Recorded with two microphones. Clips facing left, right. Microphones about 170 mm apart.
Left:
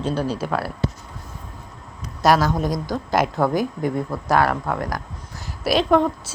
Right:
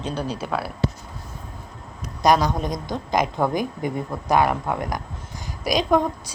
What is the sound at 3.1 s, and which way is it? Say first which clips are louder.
Speech: left 2 dB; 5° left (ahead or behind).